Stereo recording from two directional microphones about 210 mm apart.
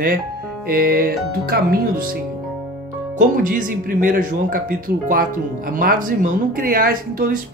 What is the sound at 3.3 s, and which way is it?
Speech, 40° right (ahead or behind).